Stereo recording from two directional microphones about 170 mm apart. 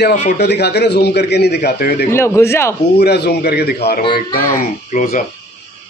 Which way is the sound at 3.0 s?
75° left (ahead or behind).